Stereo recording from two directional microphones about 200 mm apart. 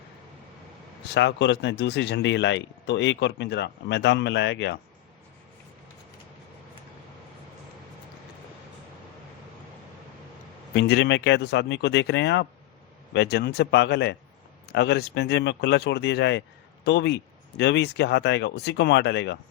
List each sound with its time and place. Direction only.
1.1 s speech: 60° left (ahead or behind)
10.8 s speech: 60° left (ahead or behind)